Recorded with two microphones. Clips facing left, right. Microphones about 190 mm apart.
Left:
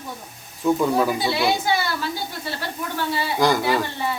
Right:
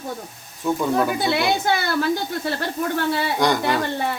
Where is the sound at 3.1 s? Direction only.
60° right (ahead or behind).